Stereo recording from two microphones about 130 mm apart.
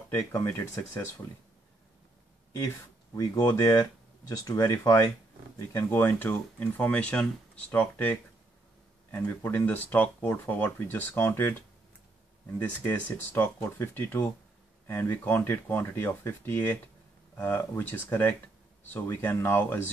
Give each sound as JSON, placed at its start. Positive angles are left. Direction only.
{"t": 0.3, "sound": "speech", "side_deg": 15}
{"t": 3.2, "sound": "speech", "side_deg": 25}
{"t": 5.7, "sound": "speech", "side_deg": 15}
{"t": 12.5, "sound": "speech", "side_deg": 15}